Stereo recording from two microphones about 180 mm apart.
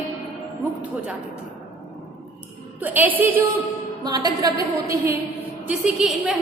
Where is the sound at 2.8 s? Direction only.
10° right (ahead or behind).